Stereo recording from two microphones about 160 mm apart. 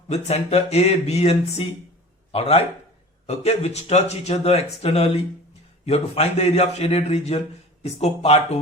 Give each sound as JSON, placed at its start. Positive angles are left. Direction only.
{"t": 0.1, "sound": "a man's voice", "side_deg": 45}